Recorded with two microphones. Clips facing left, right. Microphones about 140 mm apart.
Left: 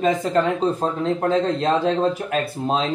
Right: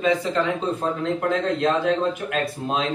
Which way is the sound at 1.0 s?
35° left (ahead or behind).